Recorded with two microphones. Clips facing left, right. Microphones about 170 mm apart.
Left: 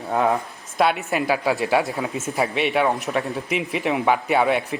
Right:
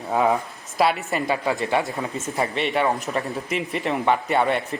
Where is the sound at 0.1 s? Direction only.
Centre (ahead or behind).